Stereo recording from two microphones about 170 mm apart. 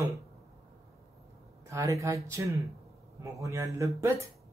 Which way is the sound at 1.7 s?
20° right (ahead or behind).